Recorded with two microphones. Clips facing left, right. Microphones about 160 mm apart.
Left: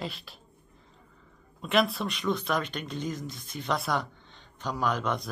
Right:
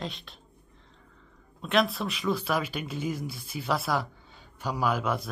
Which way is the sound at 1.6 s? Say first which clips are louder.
Even; centre (ahead or behind).